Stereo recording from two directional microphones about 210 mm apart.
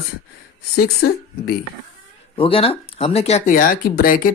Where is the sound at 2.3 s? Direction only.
25° left (ahead or behind).